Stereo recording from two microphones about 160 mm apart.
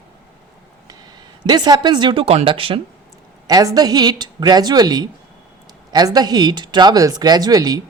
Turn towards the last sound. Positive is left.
turn(degrees=-25)  # may be behind; listen again after turning